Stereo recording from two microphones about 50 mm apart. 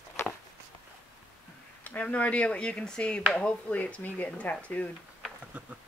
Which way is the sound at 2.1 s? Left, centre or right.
Left.